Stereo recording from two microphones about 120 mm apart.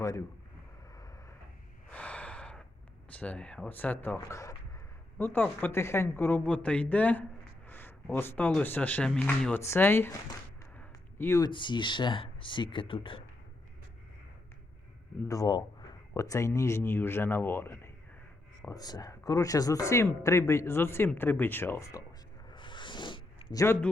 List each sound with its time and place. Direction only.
1.9 s gasp: 10° left (ahead or behind)
3.1 s a man's voice: 10° left (ahead or behind)
7.7 s a sound: 15° left (ahead or behind)
8.1 s a man's voice: 15° left (ahead or behind)
10.8 s a sound: 20° left (ahead or behind)
11.4 s speech: 40° left (ahead or behind)
15.3 s speech: 30° left (ahead or behind)
18.7 s a man's voice: 35° left (ahead or behind)
22.4 s a sound: 40° left (ahead or behind)